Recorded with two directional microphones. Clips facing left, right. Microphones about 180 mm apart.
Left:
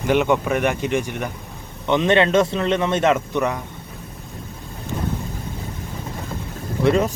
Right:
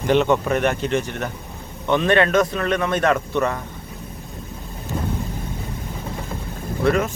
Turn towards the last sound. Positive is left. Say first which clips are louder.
# left 2 dB
turn(degrees=25)  # may be behind; listen again after turning